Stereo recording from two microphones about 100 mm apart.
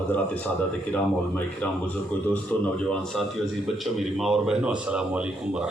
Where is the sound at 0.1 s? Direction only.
15° left (ahead or behind).